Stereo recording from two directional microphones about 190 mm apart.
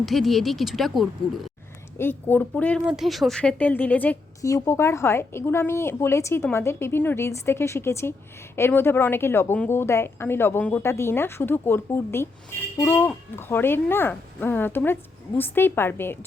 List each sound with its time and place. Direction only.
0.0 s speech: centre (ahead or behind)
2.0 s a woman's voice: 10° left (ahead or behind)